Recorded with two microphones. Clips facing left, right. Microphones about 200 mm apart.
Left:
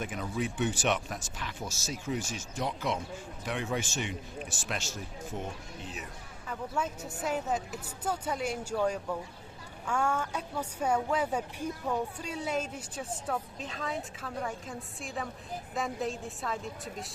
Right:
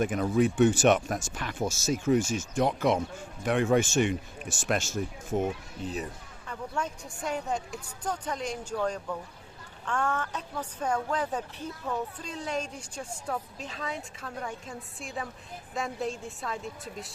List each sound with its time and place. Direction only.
0.0 s speech: 50° right (ahead or behind)
6.5 s a woman's voice: 5° left (ahead or behind)